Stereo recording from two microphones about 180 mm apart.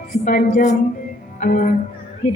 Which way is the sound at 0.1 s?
50° left (ahead or behind).